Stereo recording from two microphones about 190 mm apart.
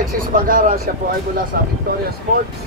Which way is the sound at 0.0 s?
45° right (ahead or behind).